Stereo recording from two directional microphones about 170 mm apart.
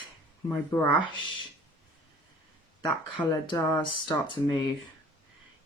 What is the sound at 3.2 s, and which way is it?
Speech, 25° left (ahead or behind).